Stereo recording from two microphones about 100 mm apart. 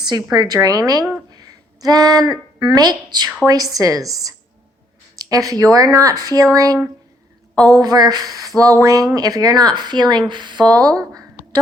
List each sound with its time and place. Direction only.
0.0 s speech: 45° right (ahead or behind)